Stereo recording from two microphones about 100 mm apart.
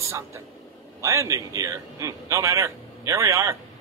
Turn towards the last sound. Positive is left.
turn(degrees=-30)  # may be behind; listen again after turning